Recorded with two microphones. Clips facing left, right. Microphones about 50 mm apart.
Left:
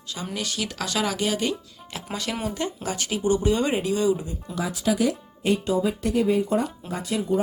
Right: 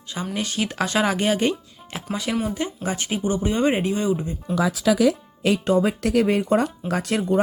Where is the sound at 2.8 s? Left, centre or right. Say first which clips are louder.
Left 1 dB; right.